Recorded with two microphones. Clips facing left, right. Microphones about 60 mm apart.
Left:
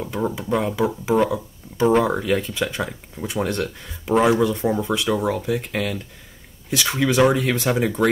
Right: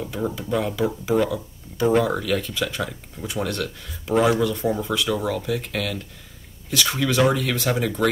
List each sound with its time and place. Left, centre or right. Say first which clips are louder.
0.0 s speech: left 2 dB; centre